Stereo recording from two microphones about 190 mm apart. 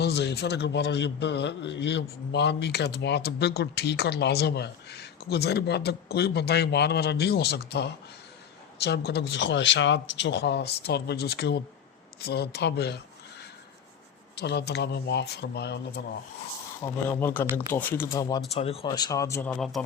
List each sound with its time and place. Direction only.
0.0 s a man's voice: 60° left (ahead or behind)
14.3 s a man's voice: 60° left (ahead or behind)
16.8 s speech: 10° left (ahead or behind)
18.5 s speech: 30° left (ahead or behind); by 19.8 s centre (ahead or behind)